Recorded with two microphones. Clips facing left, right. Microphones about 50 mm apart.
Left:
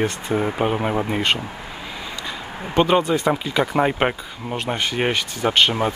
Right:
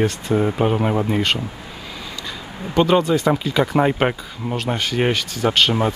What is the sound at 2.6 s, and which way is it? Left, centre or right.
Speech, left.